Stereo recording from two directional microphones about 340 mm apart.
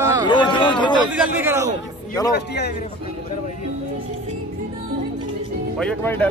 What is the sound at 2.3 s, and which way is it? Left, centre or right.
Speech, left.